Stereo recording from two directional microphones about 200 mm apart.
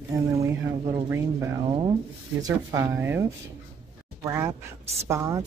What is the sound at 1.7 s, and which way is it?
Speech, 25° right (ahead or behind).